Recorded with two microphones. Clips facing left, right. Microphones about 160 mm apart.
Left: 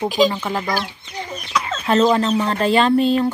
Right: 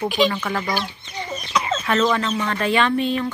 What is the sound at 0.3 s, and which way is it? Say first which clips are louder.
Speech: left 1 dB; 20° left (ahead or behind).